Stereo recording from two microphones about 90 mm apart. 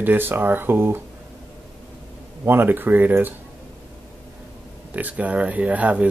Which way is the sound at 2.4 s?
25° right (ahead or behind).